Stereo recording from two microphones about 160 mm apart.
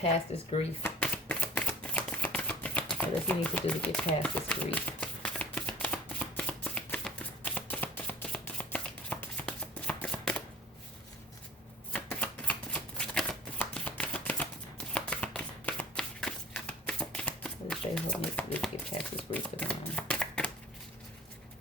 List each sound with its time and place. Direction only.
0.3 s speech: 40° left (ahead or behind)
0.8 s shuffling cards: 10° left (ahead or behind)
11.9 s shuffling cards: 10° left (ahead or behind)